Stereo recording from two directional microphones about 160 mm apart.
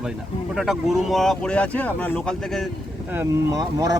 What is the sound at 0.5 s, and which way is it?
Speech, centre (ahead or behind).